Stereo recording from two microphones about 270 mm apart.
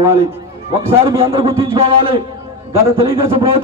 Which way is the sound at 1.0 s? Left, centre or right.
Centre.